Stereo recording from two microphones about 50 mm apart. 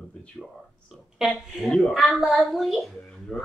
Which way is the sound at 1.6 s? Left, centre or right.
Centre.